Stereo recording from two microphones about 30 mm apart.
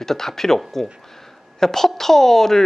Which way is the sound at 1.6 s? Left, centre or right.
Centre.